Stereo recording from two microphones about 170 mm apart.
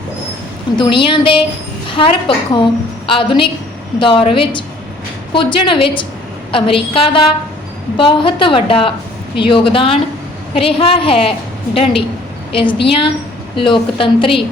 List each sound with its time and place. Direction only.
0.8 s a woman's voice: 30° left (ahead or behind)
5.3 s a woman's voice: 30° left (ahead or behind)